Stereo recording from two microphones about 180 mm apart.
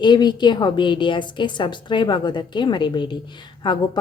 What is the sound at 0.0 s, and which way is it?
A woman's voice, 25° left (ahead or behind).